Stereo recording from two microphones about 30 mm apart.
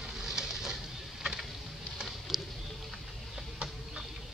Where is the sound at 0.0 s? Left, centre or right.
Centre.